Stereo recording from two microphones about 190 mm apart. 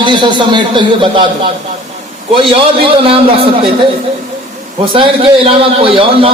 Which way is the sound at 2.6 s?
30° right (ahead or behind).